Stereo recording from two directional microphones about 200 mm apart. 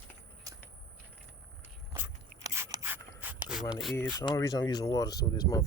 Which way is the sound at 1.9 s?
10° right (ahead or behind).